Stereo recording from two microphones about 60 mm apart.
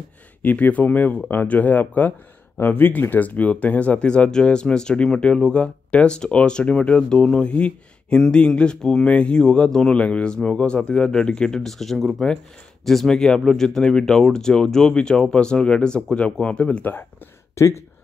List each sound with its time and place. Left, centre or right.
0.4 s speech: left
17.6 s speech: left